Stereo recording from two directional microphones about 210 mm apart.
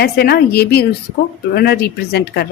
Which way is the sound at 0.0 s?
50° left (ahead or behind).